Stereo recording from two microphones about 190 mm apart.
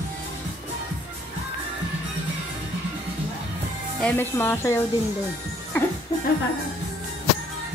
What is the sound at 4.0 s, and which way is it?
Speech, 10° left (ahead or behind).